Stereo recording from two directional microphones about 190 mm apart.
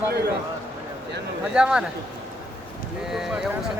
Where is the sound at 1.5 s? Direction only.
5° right (ahead or behind).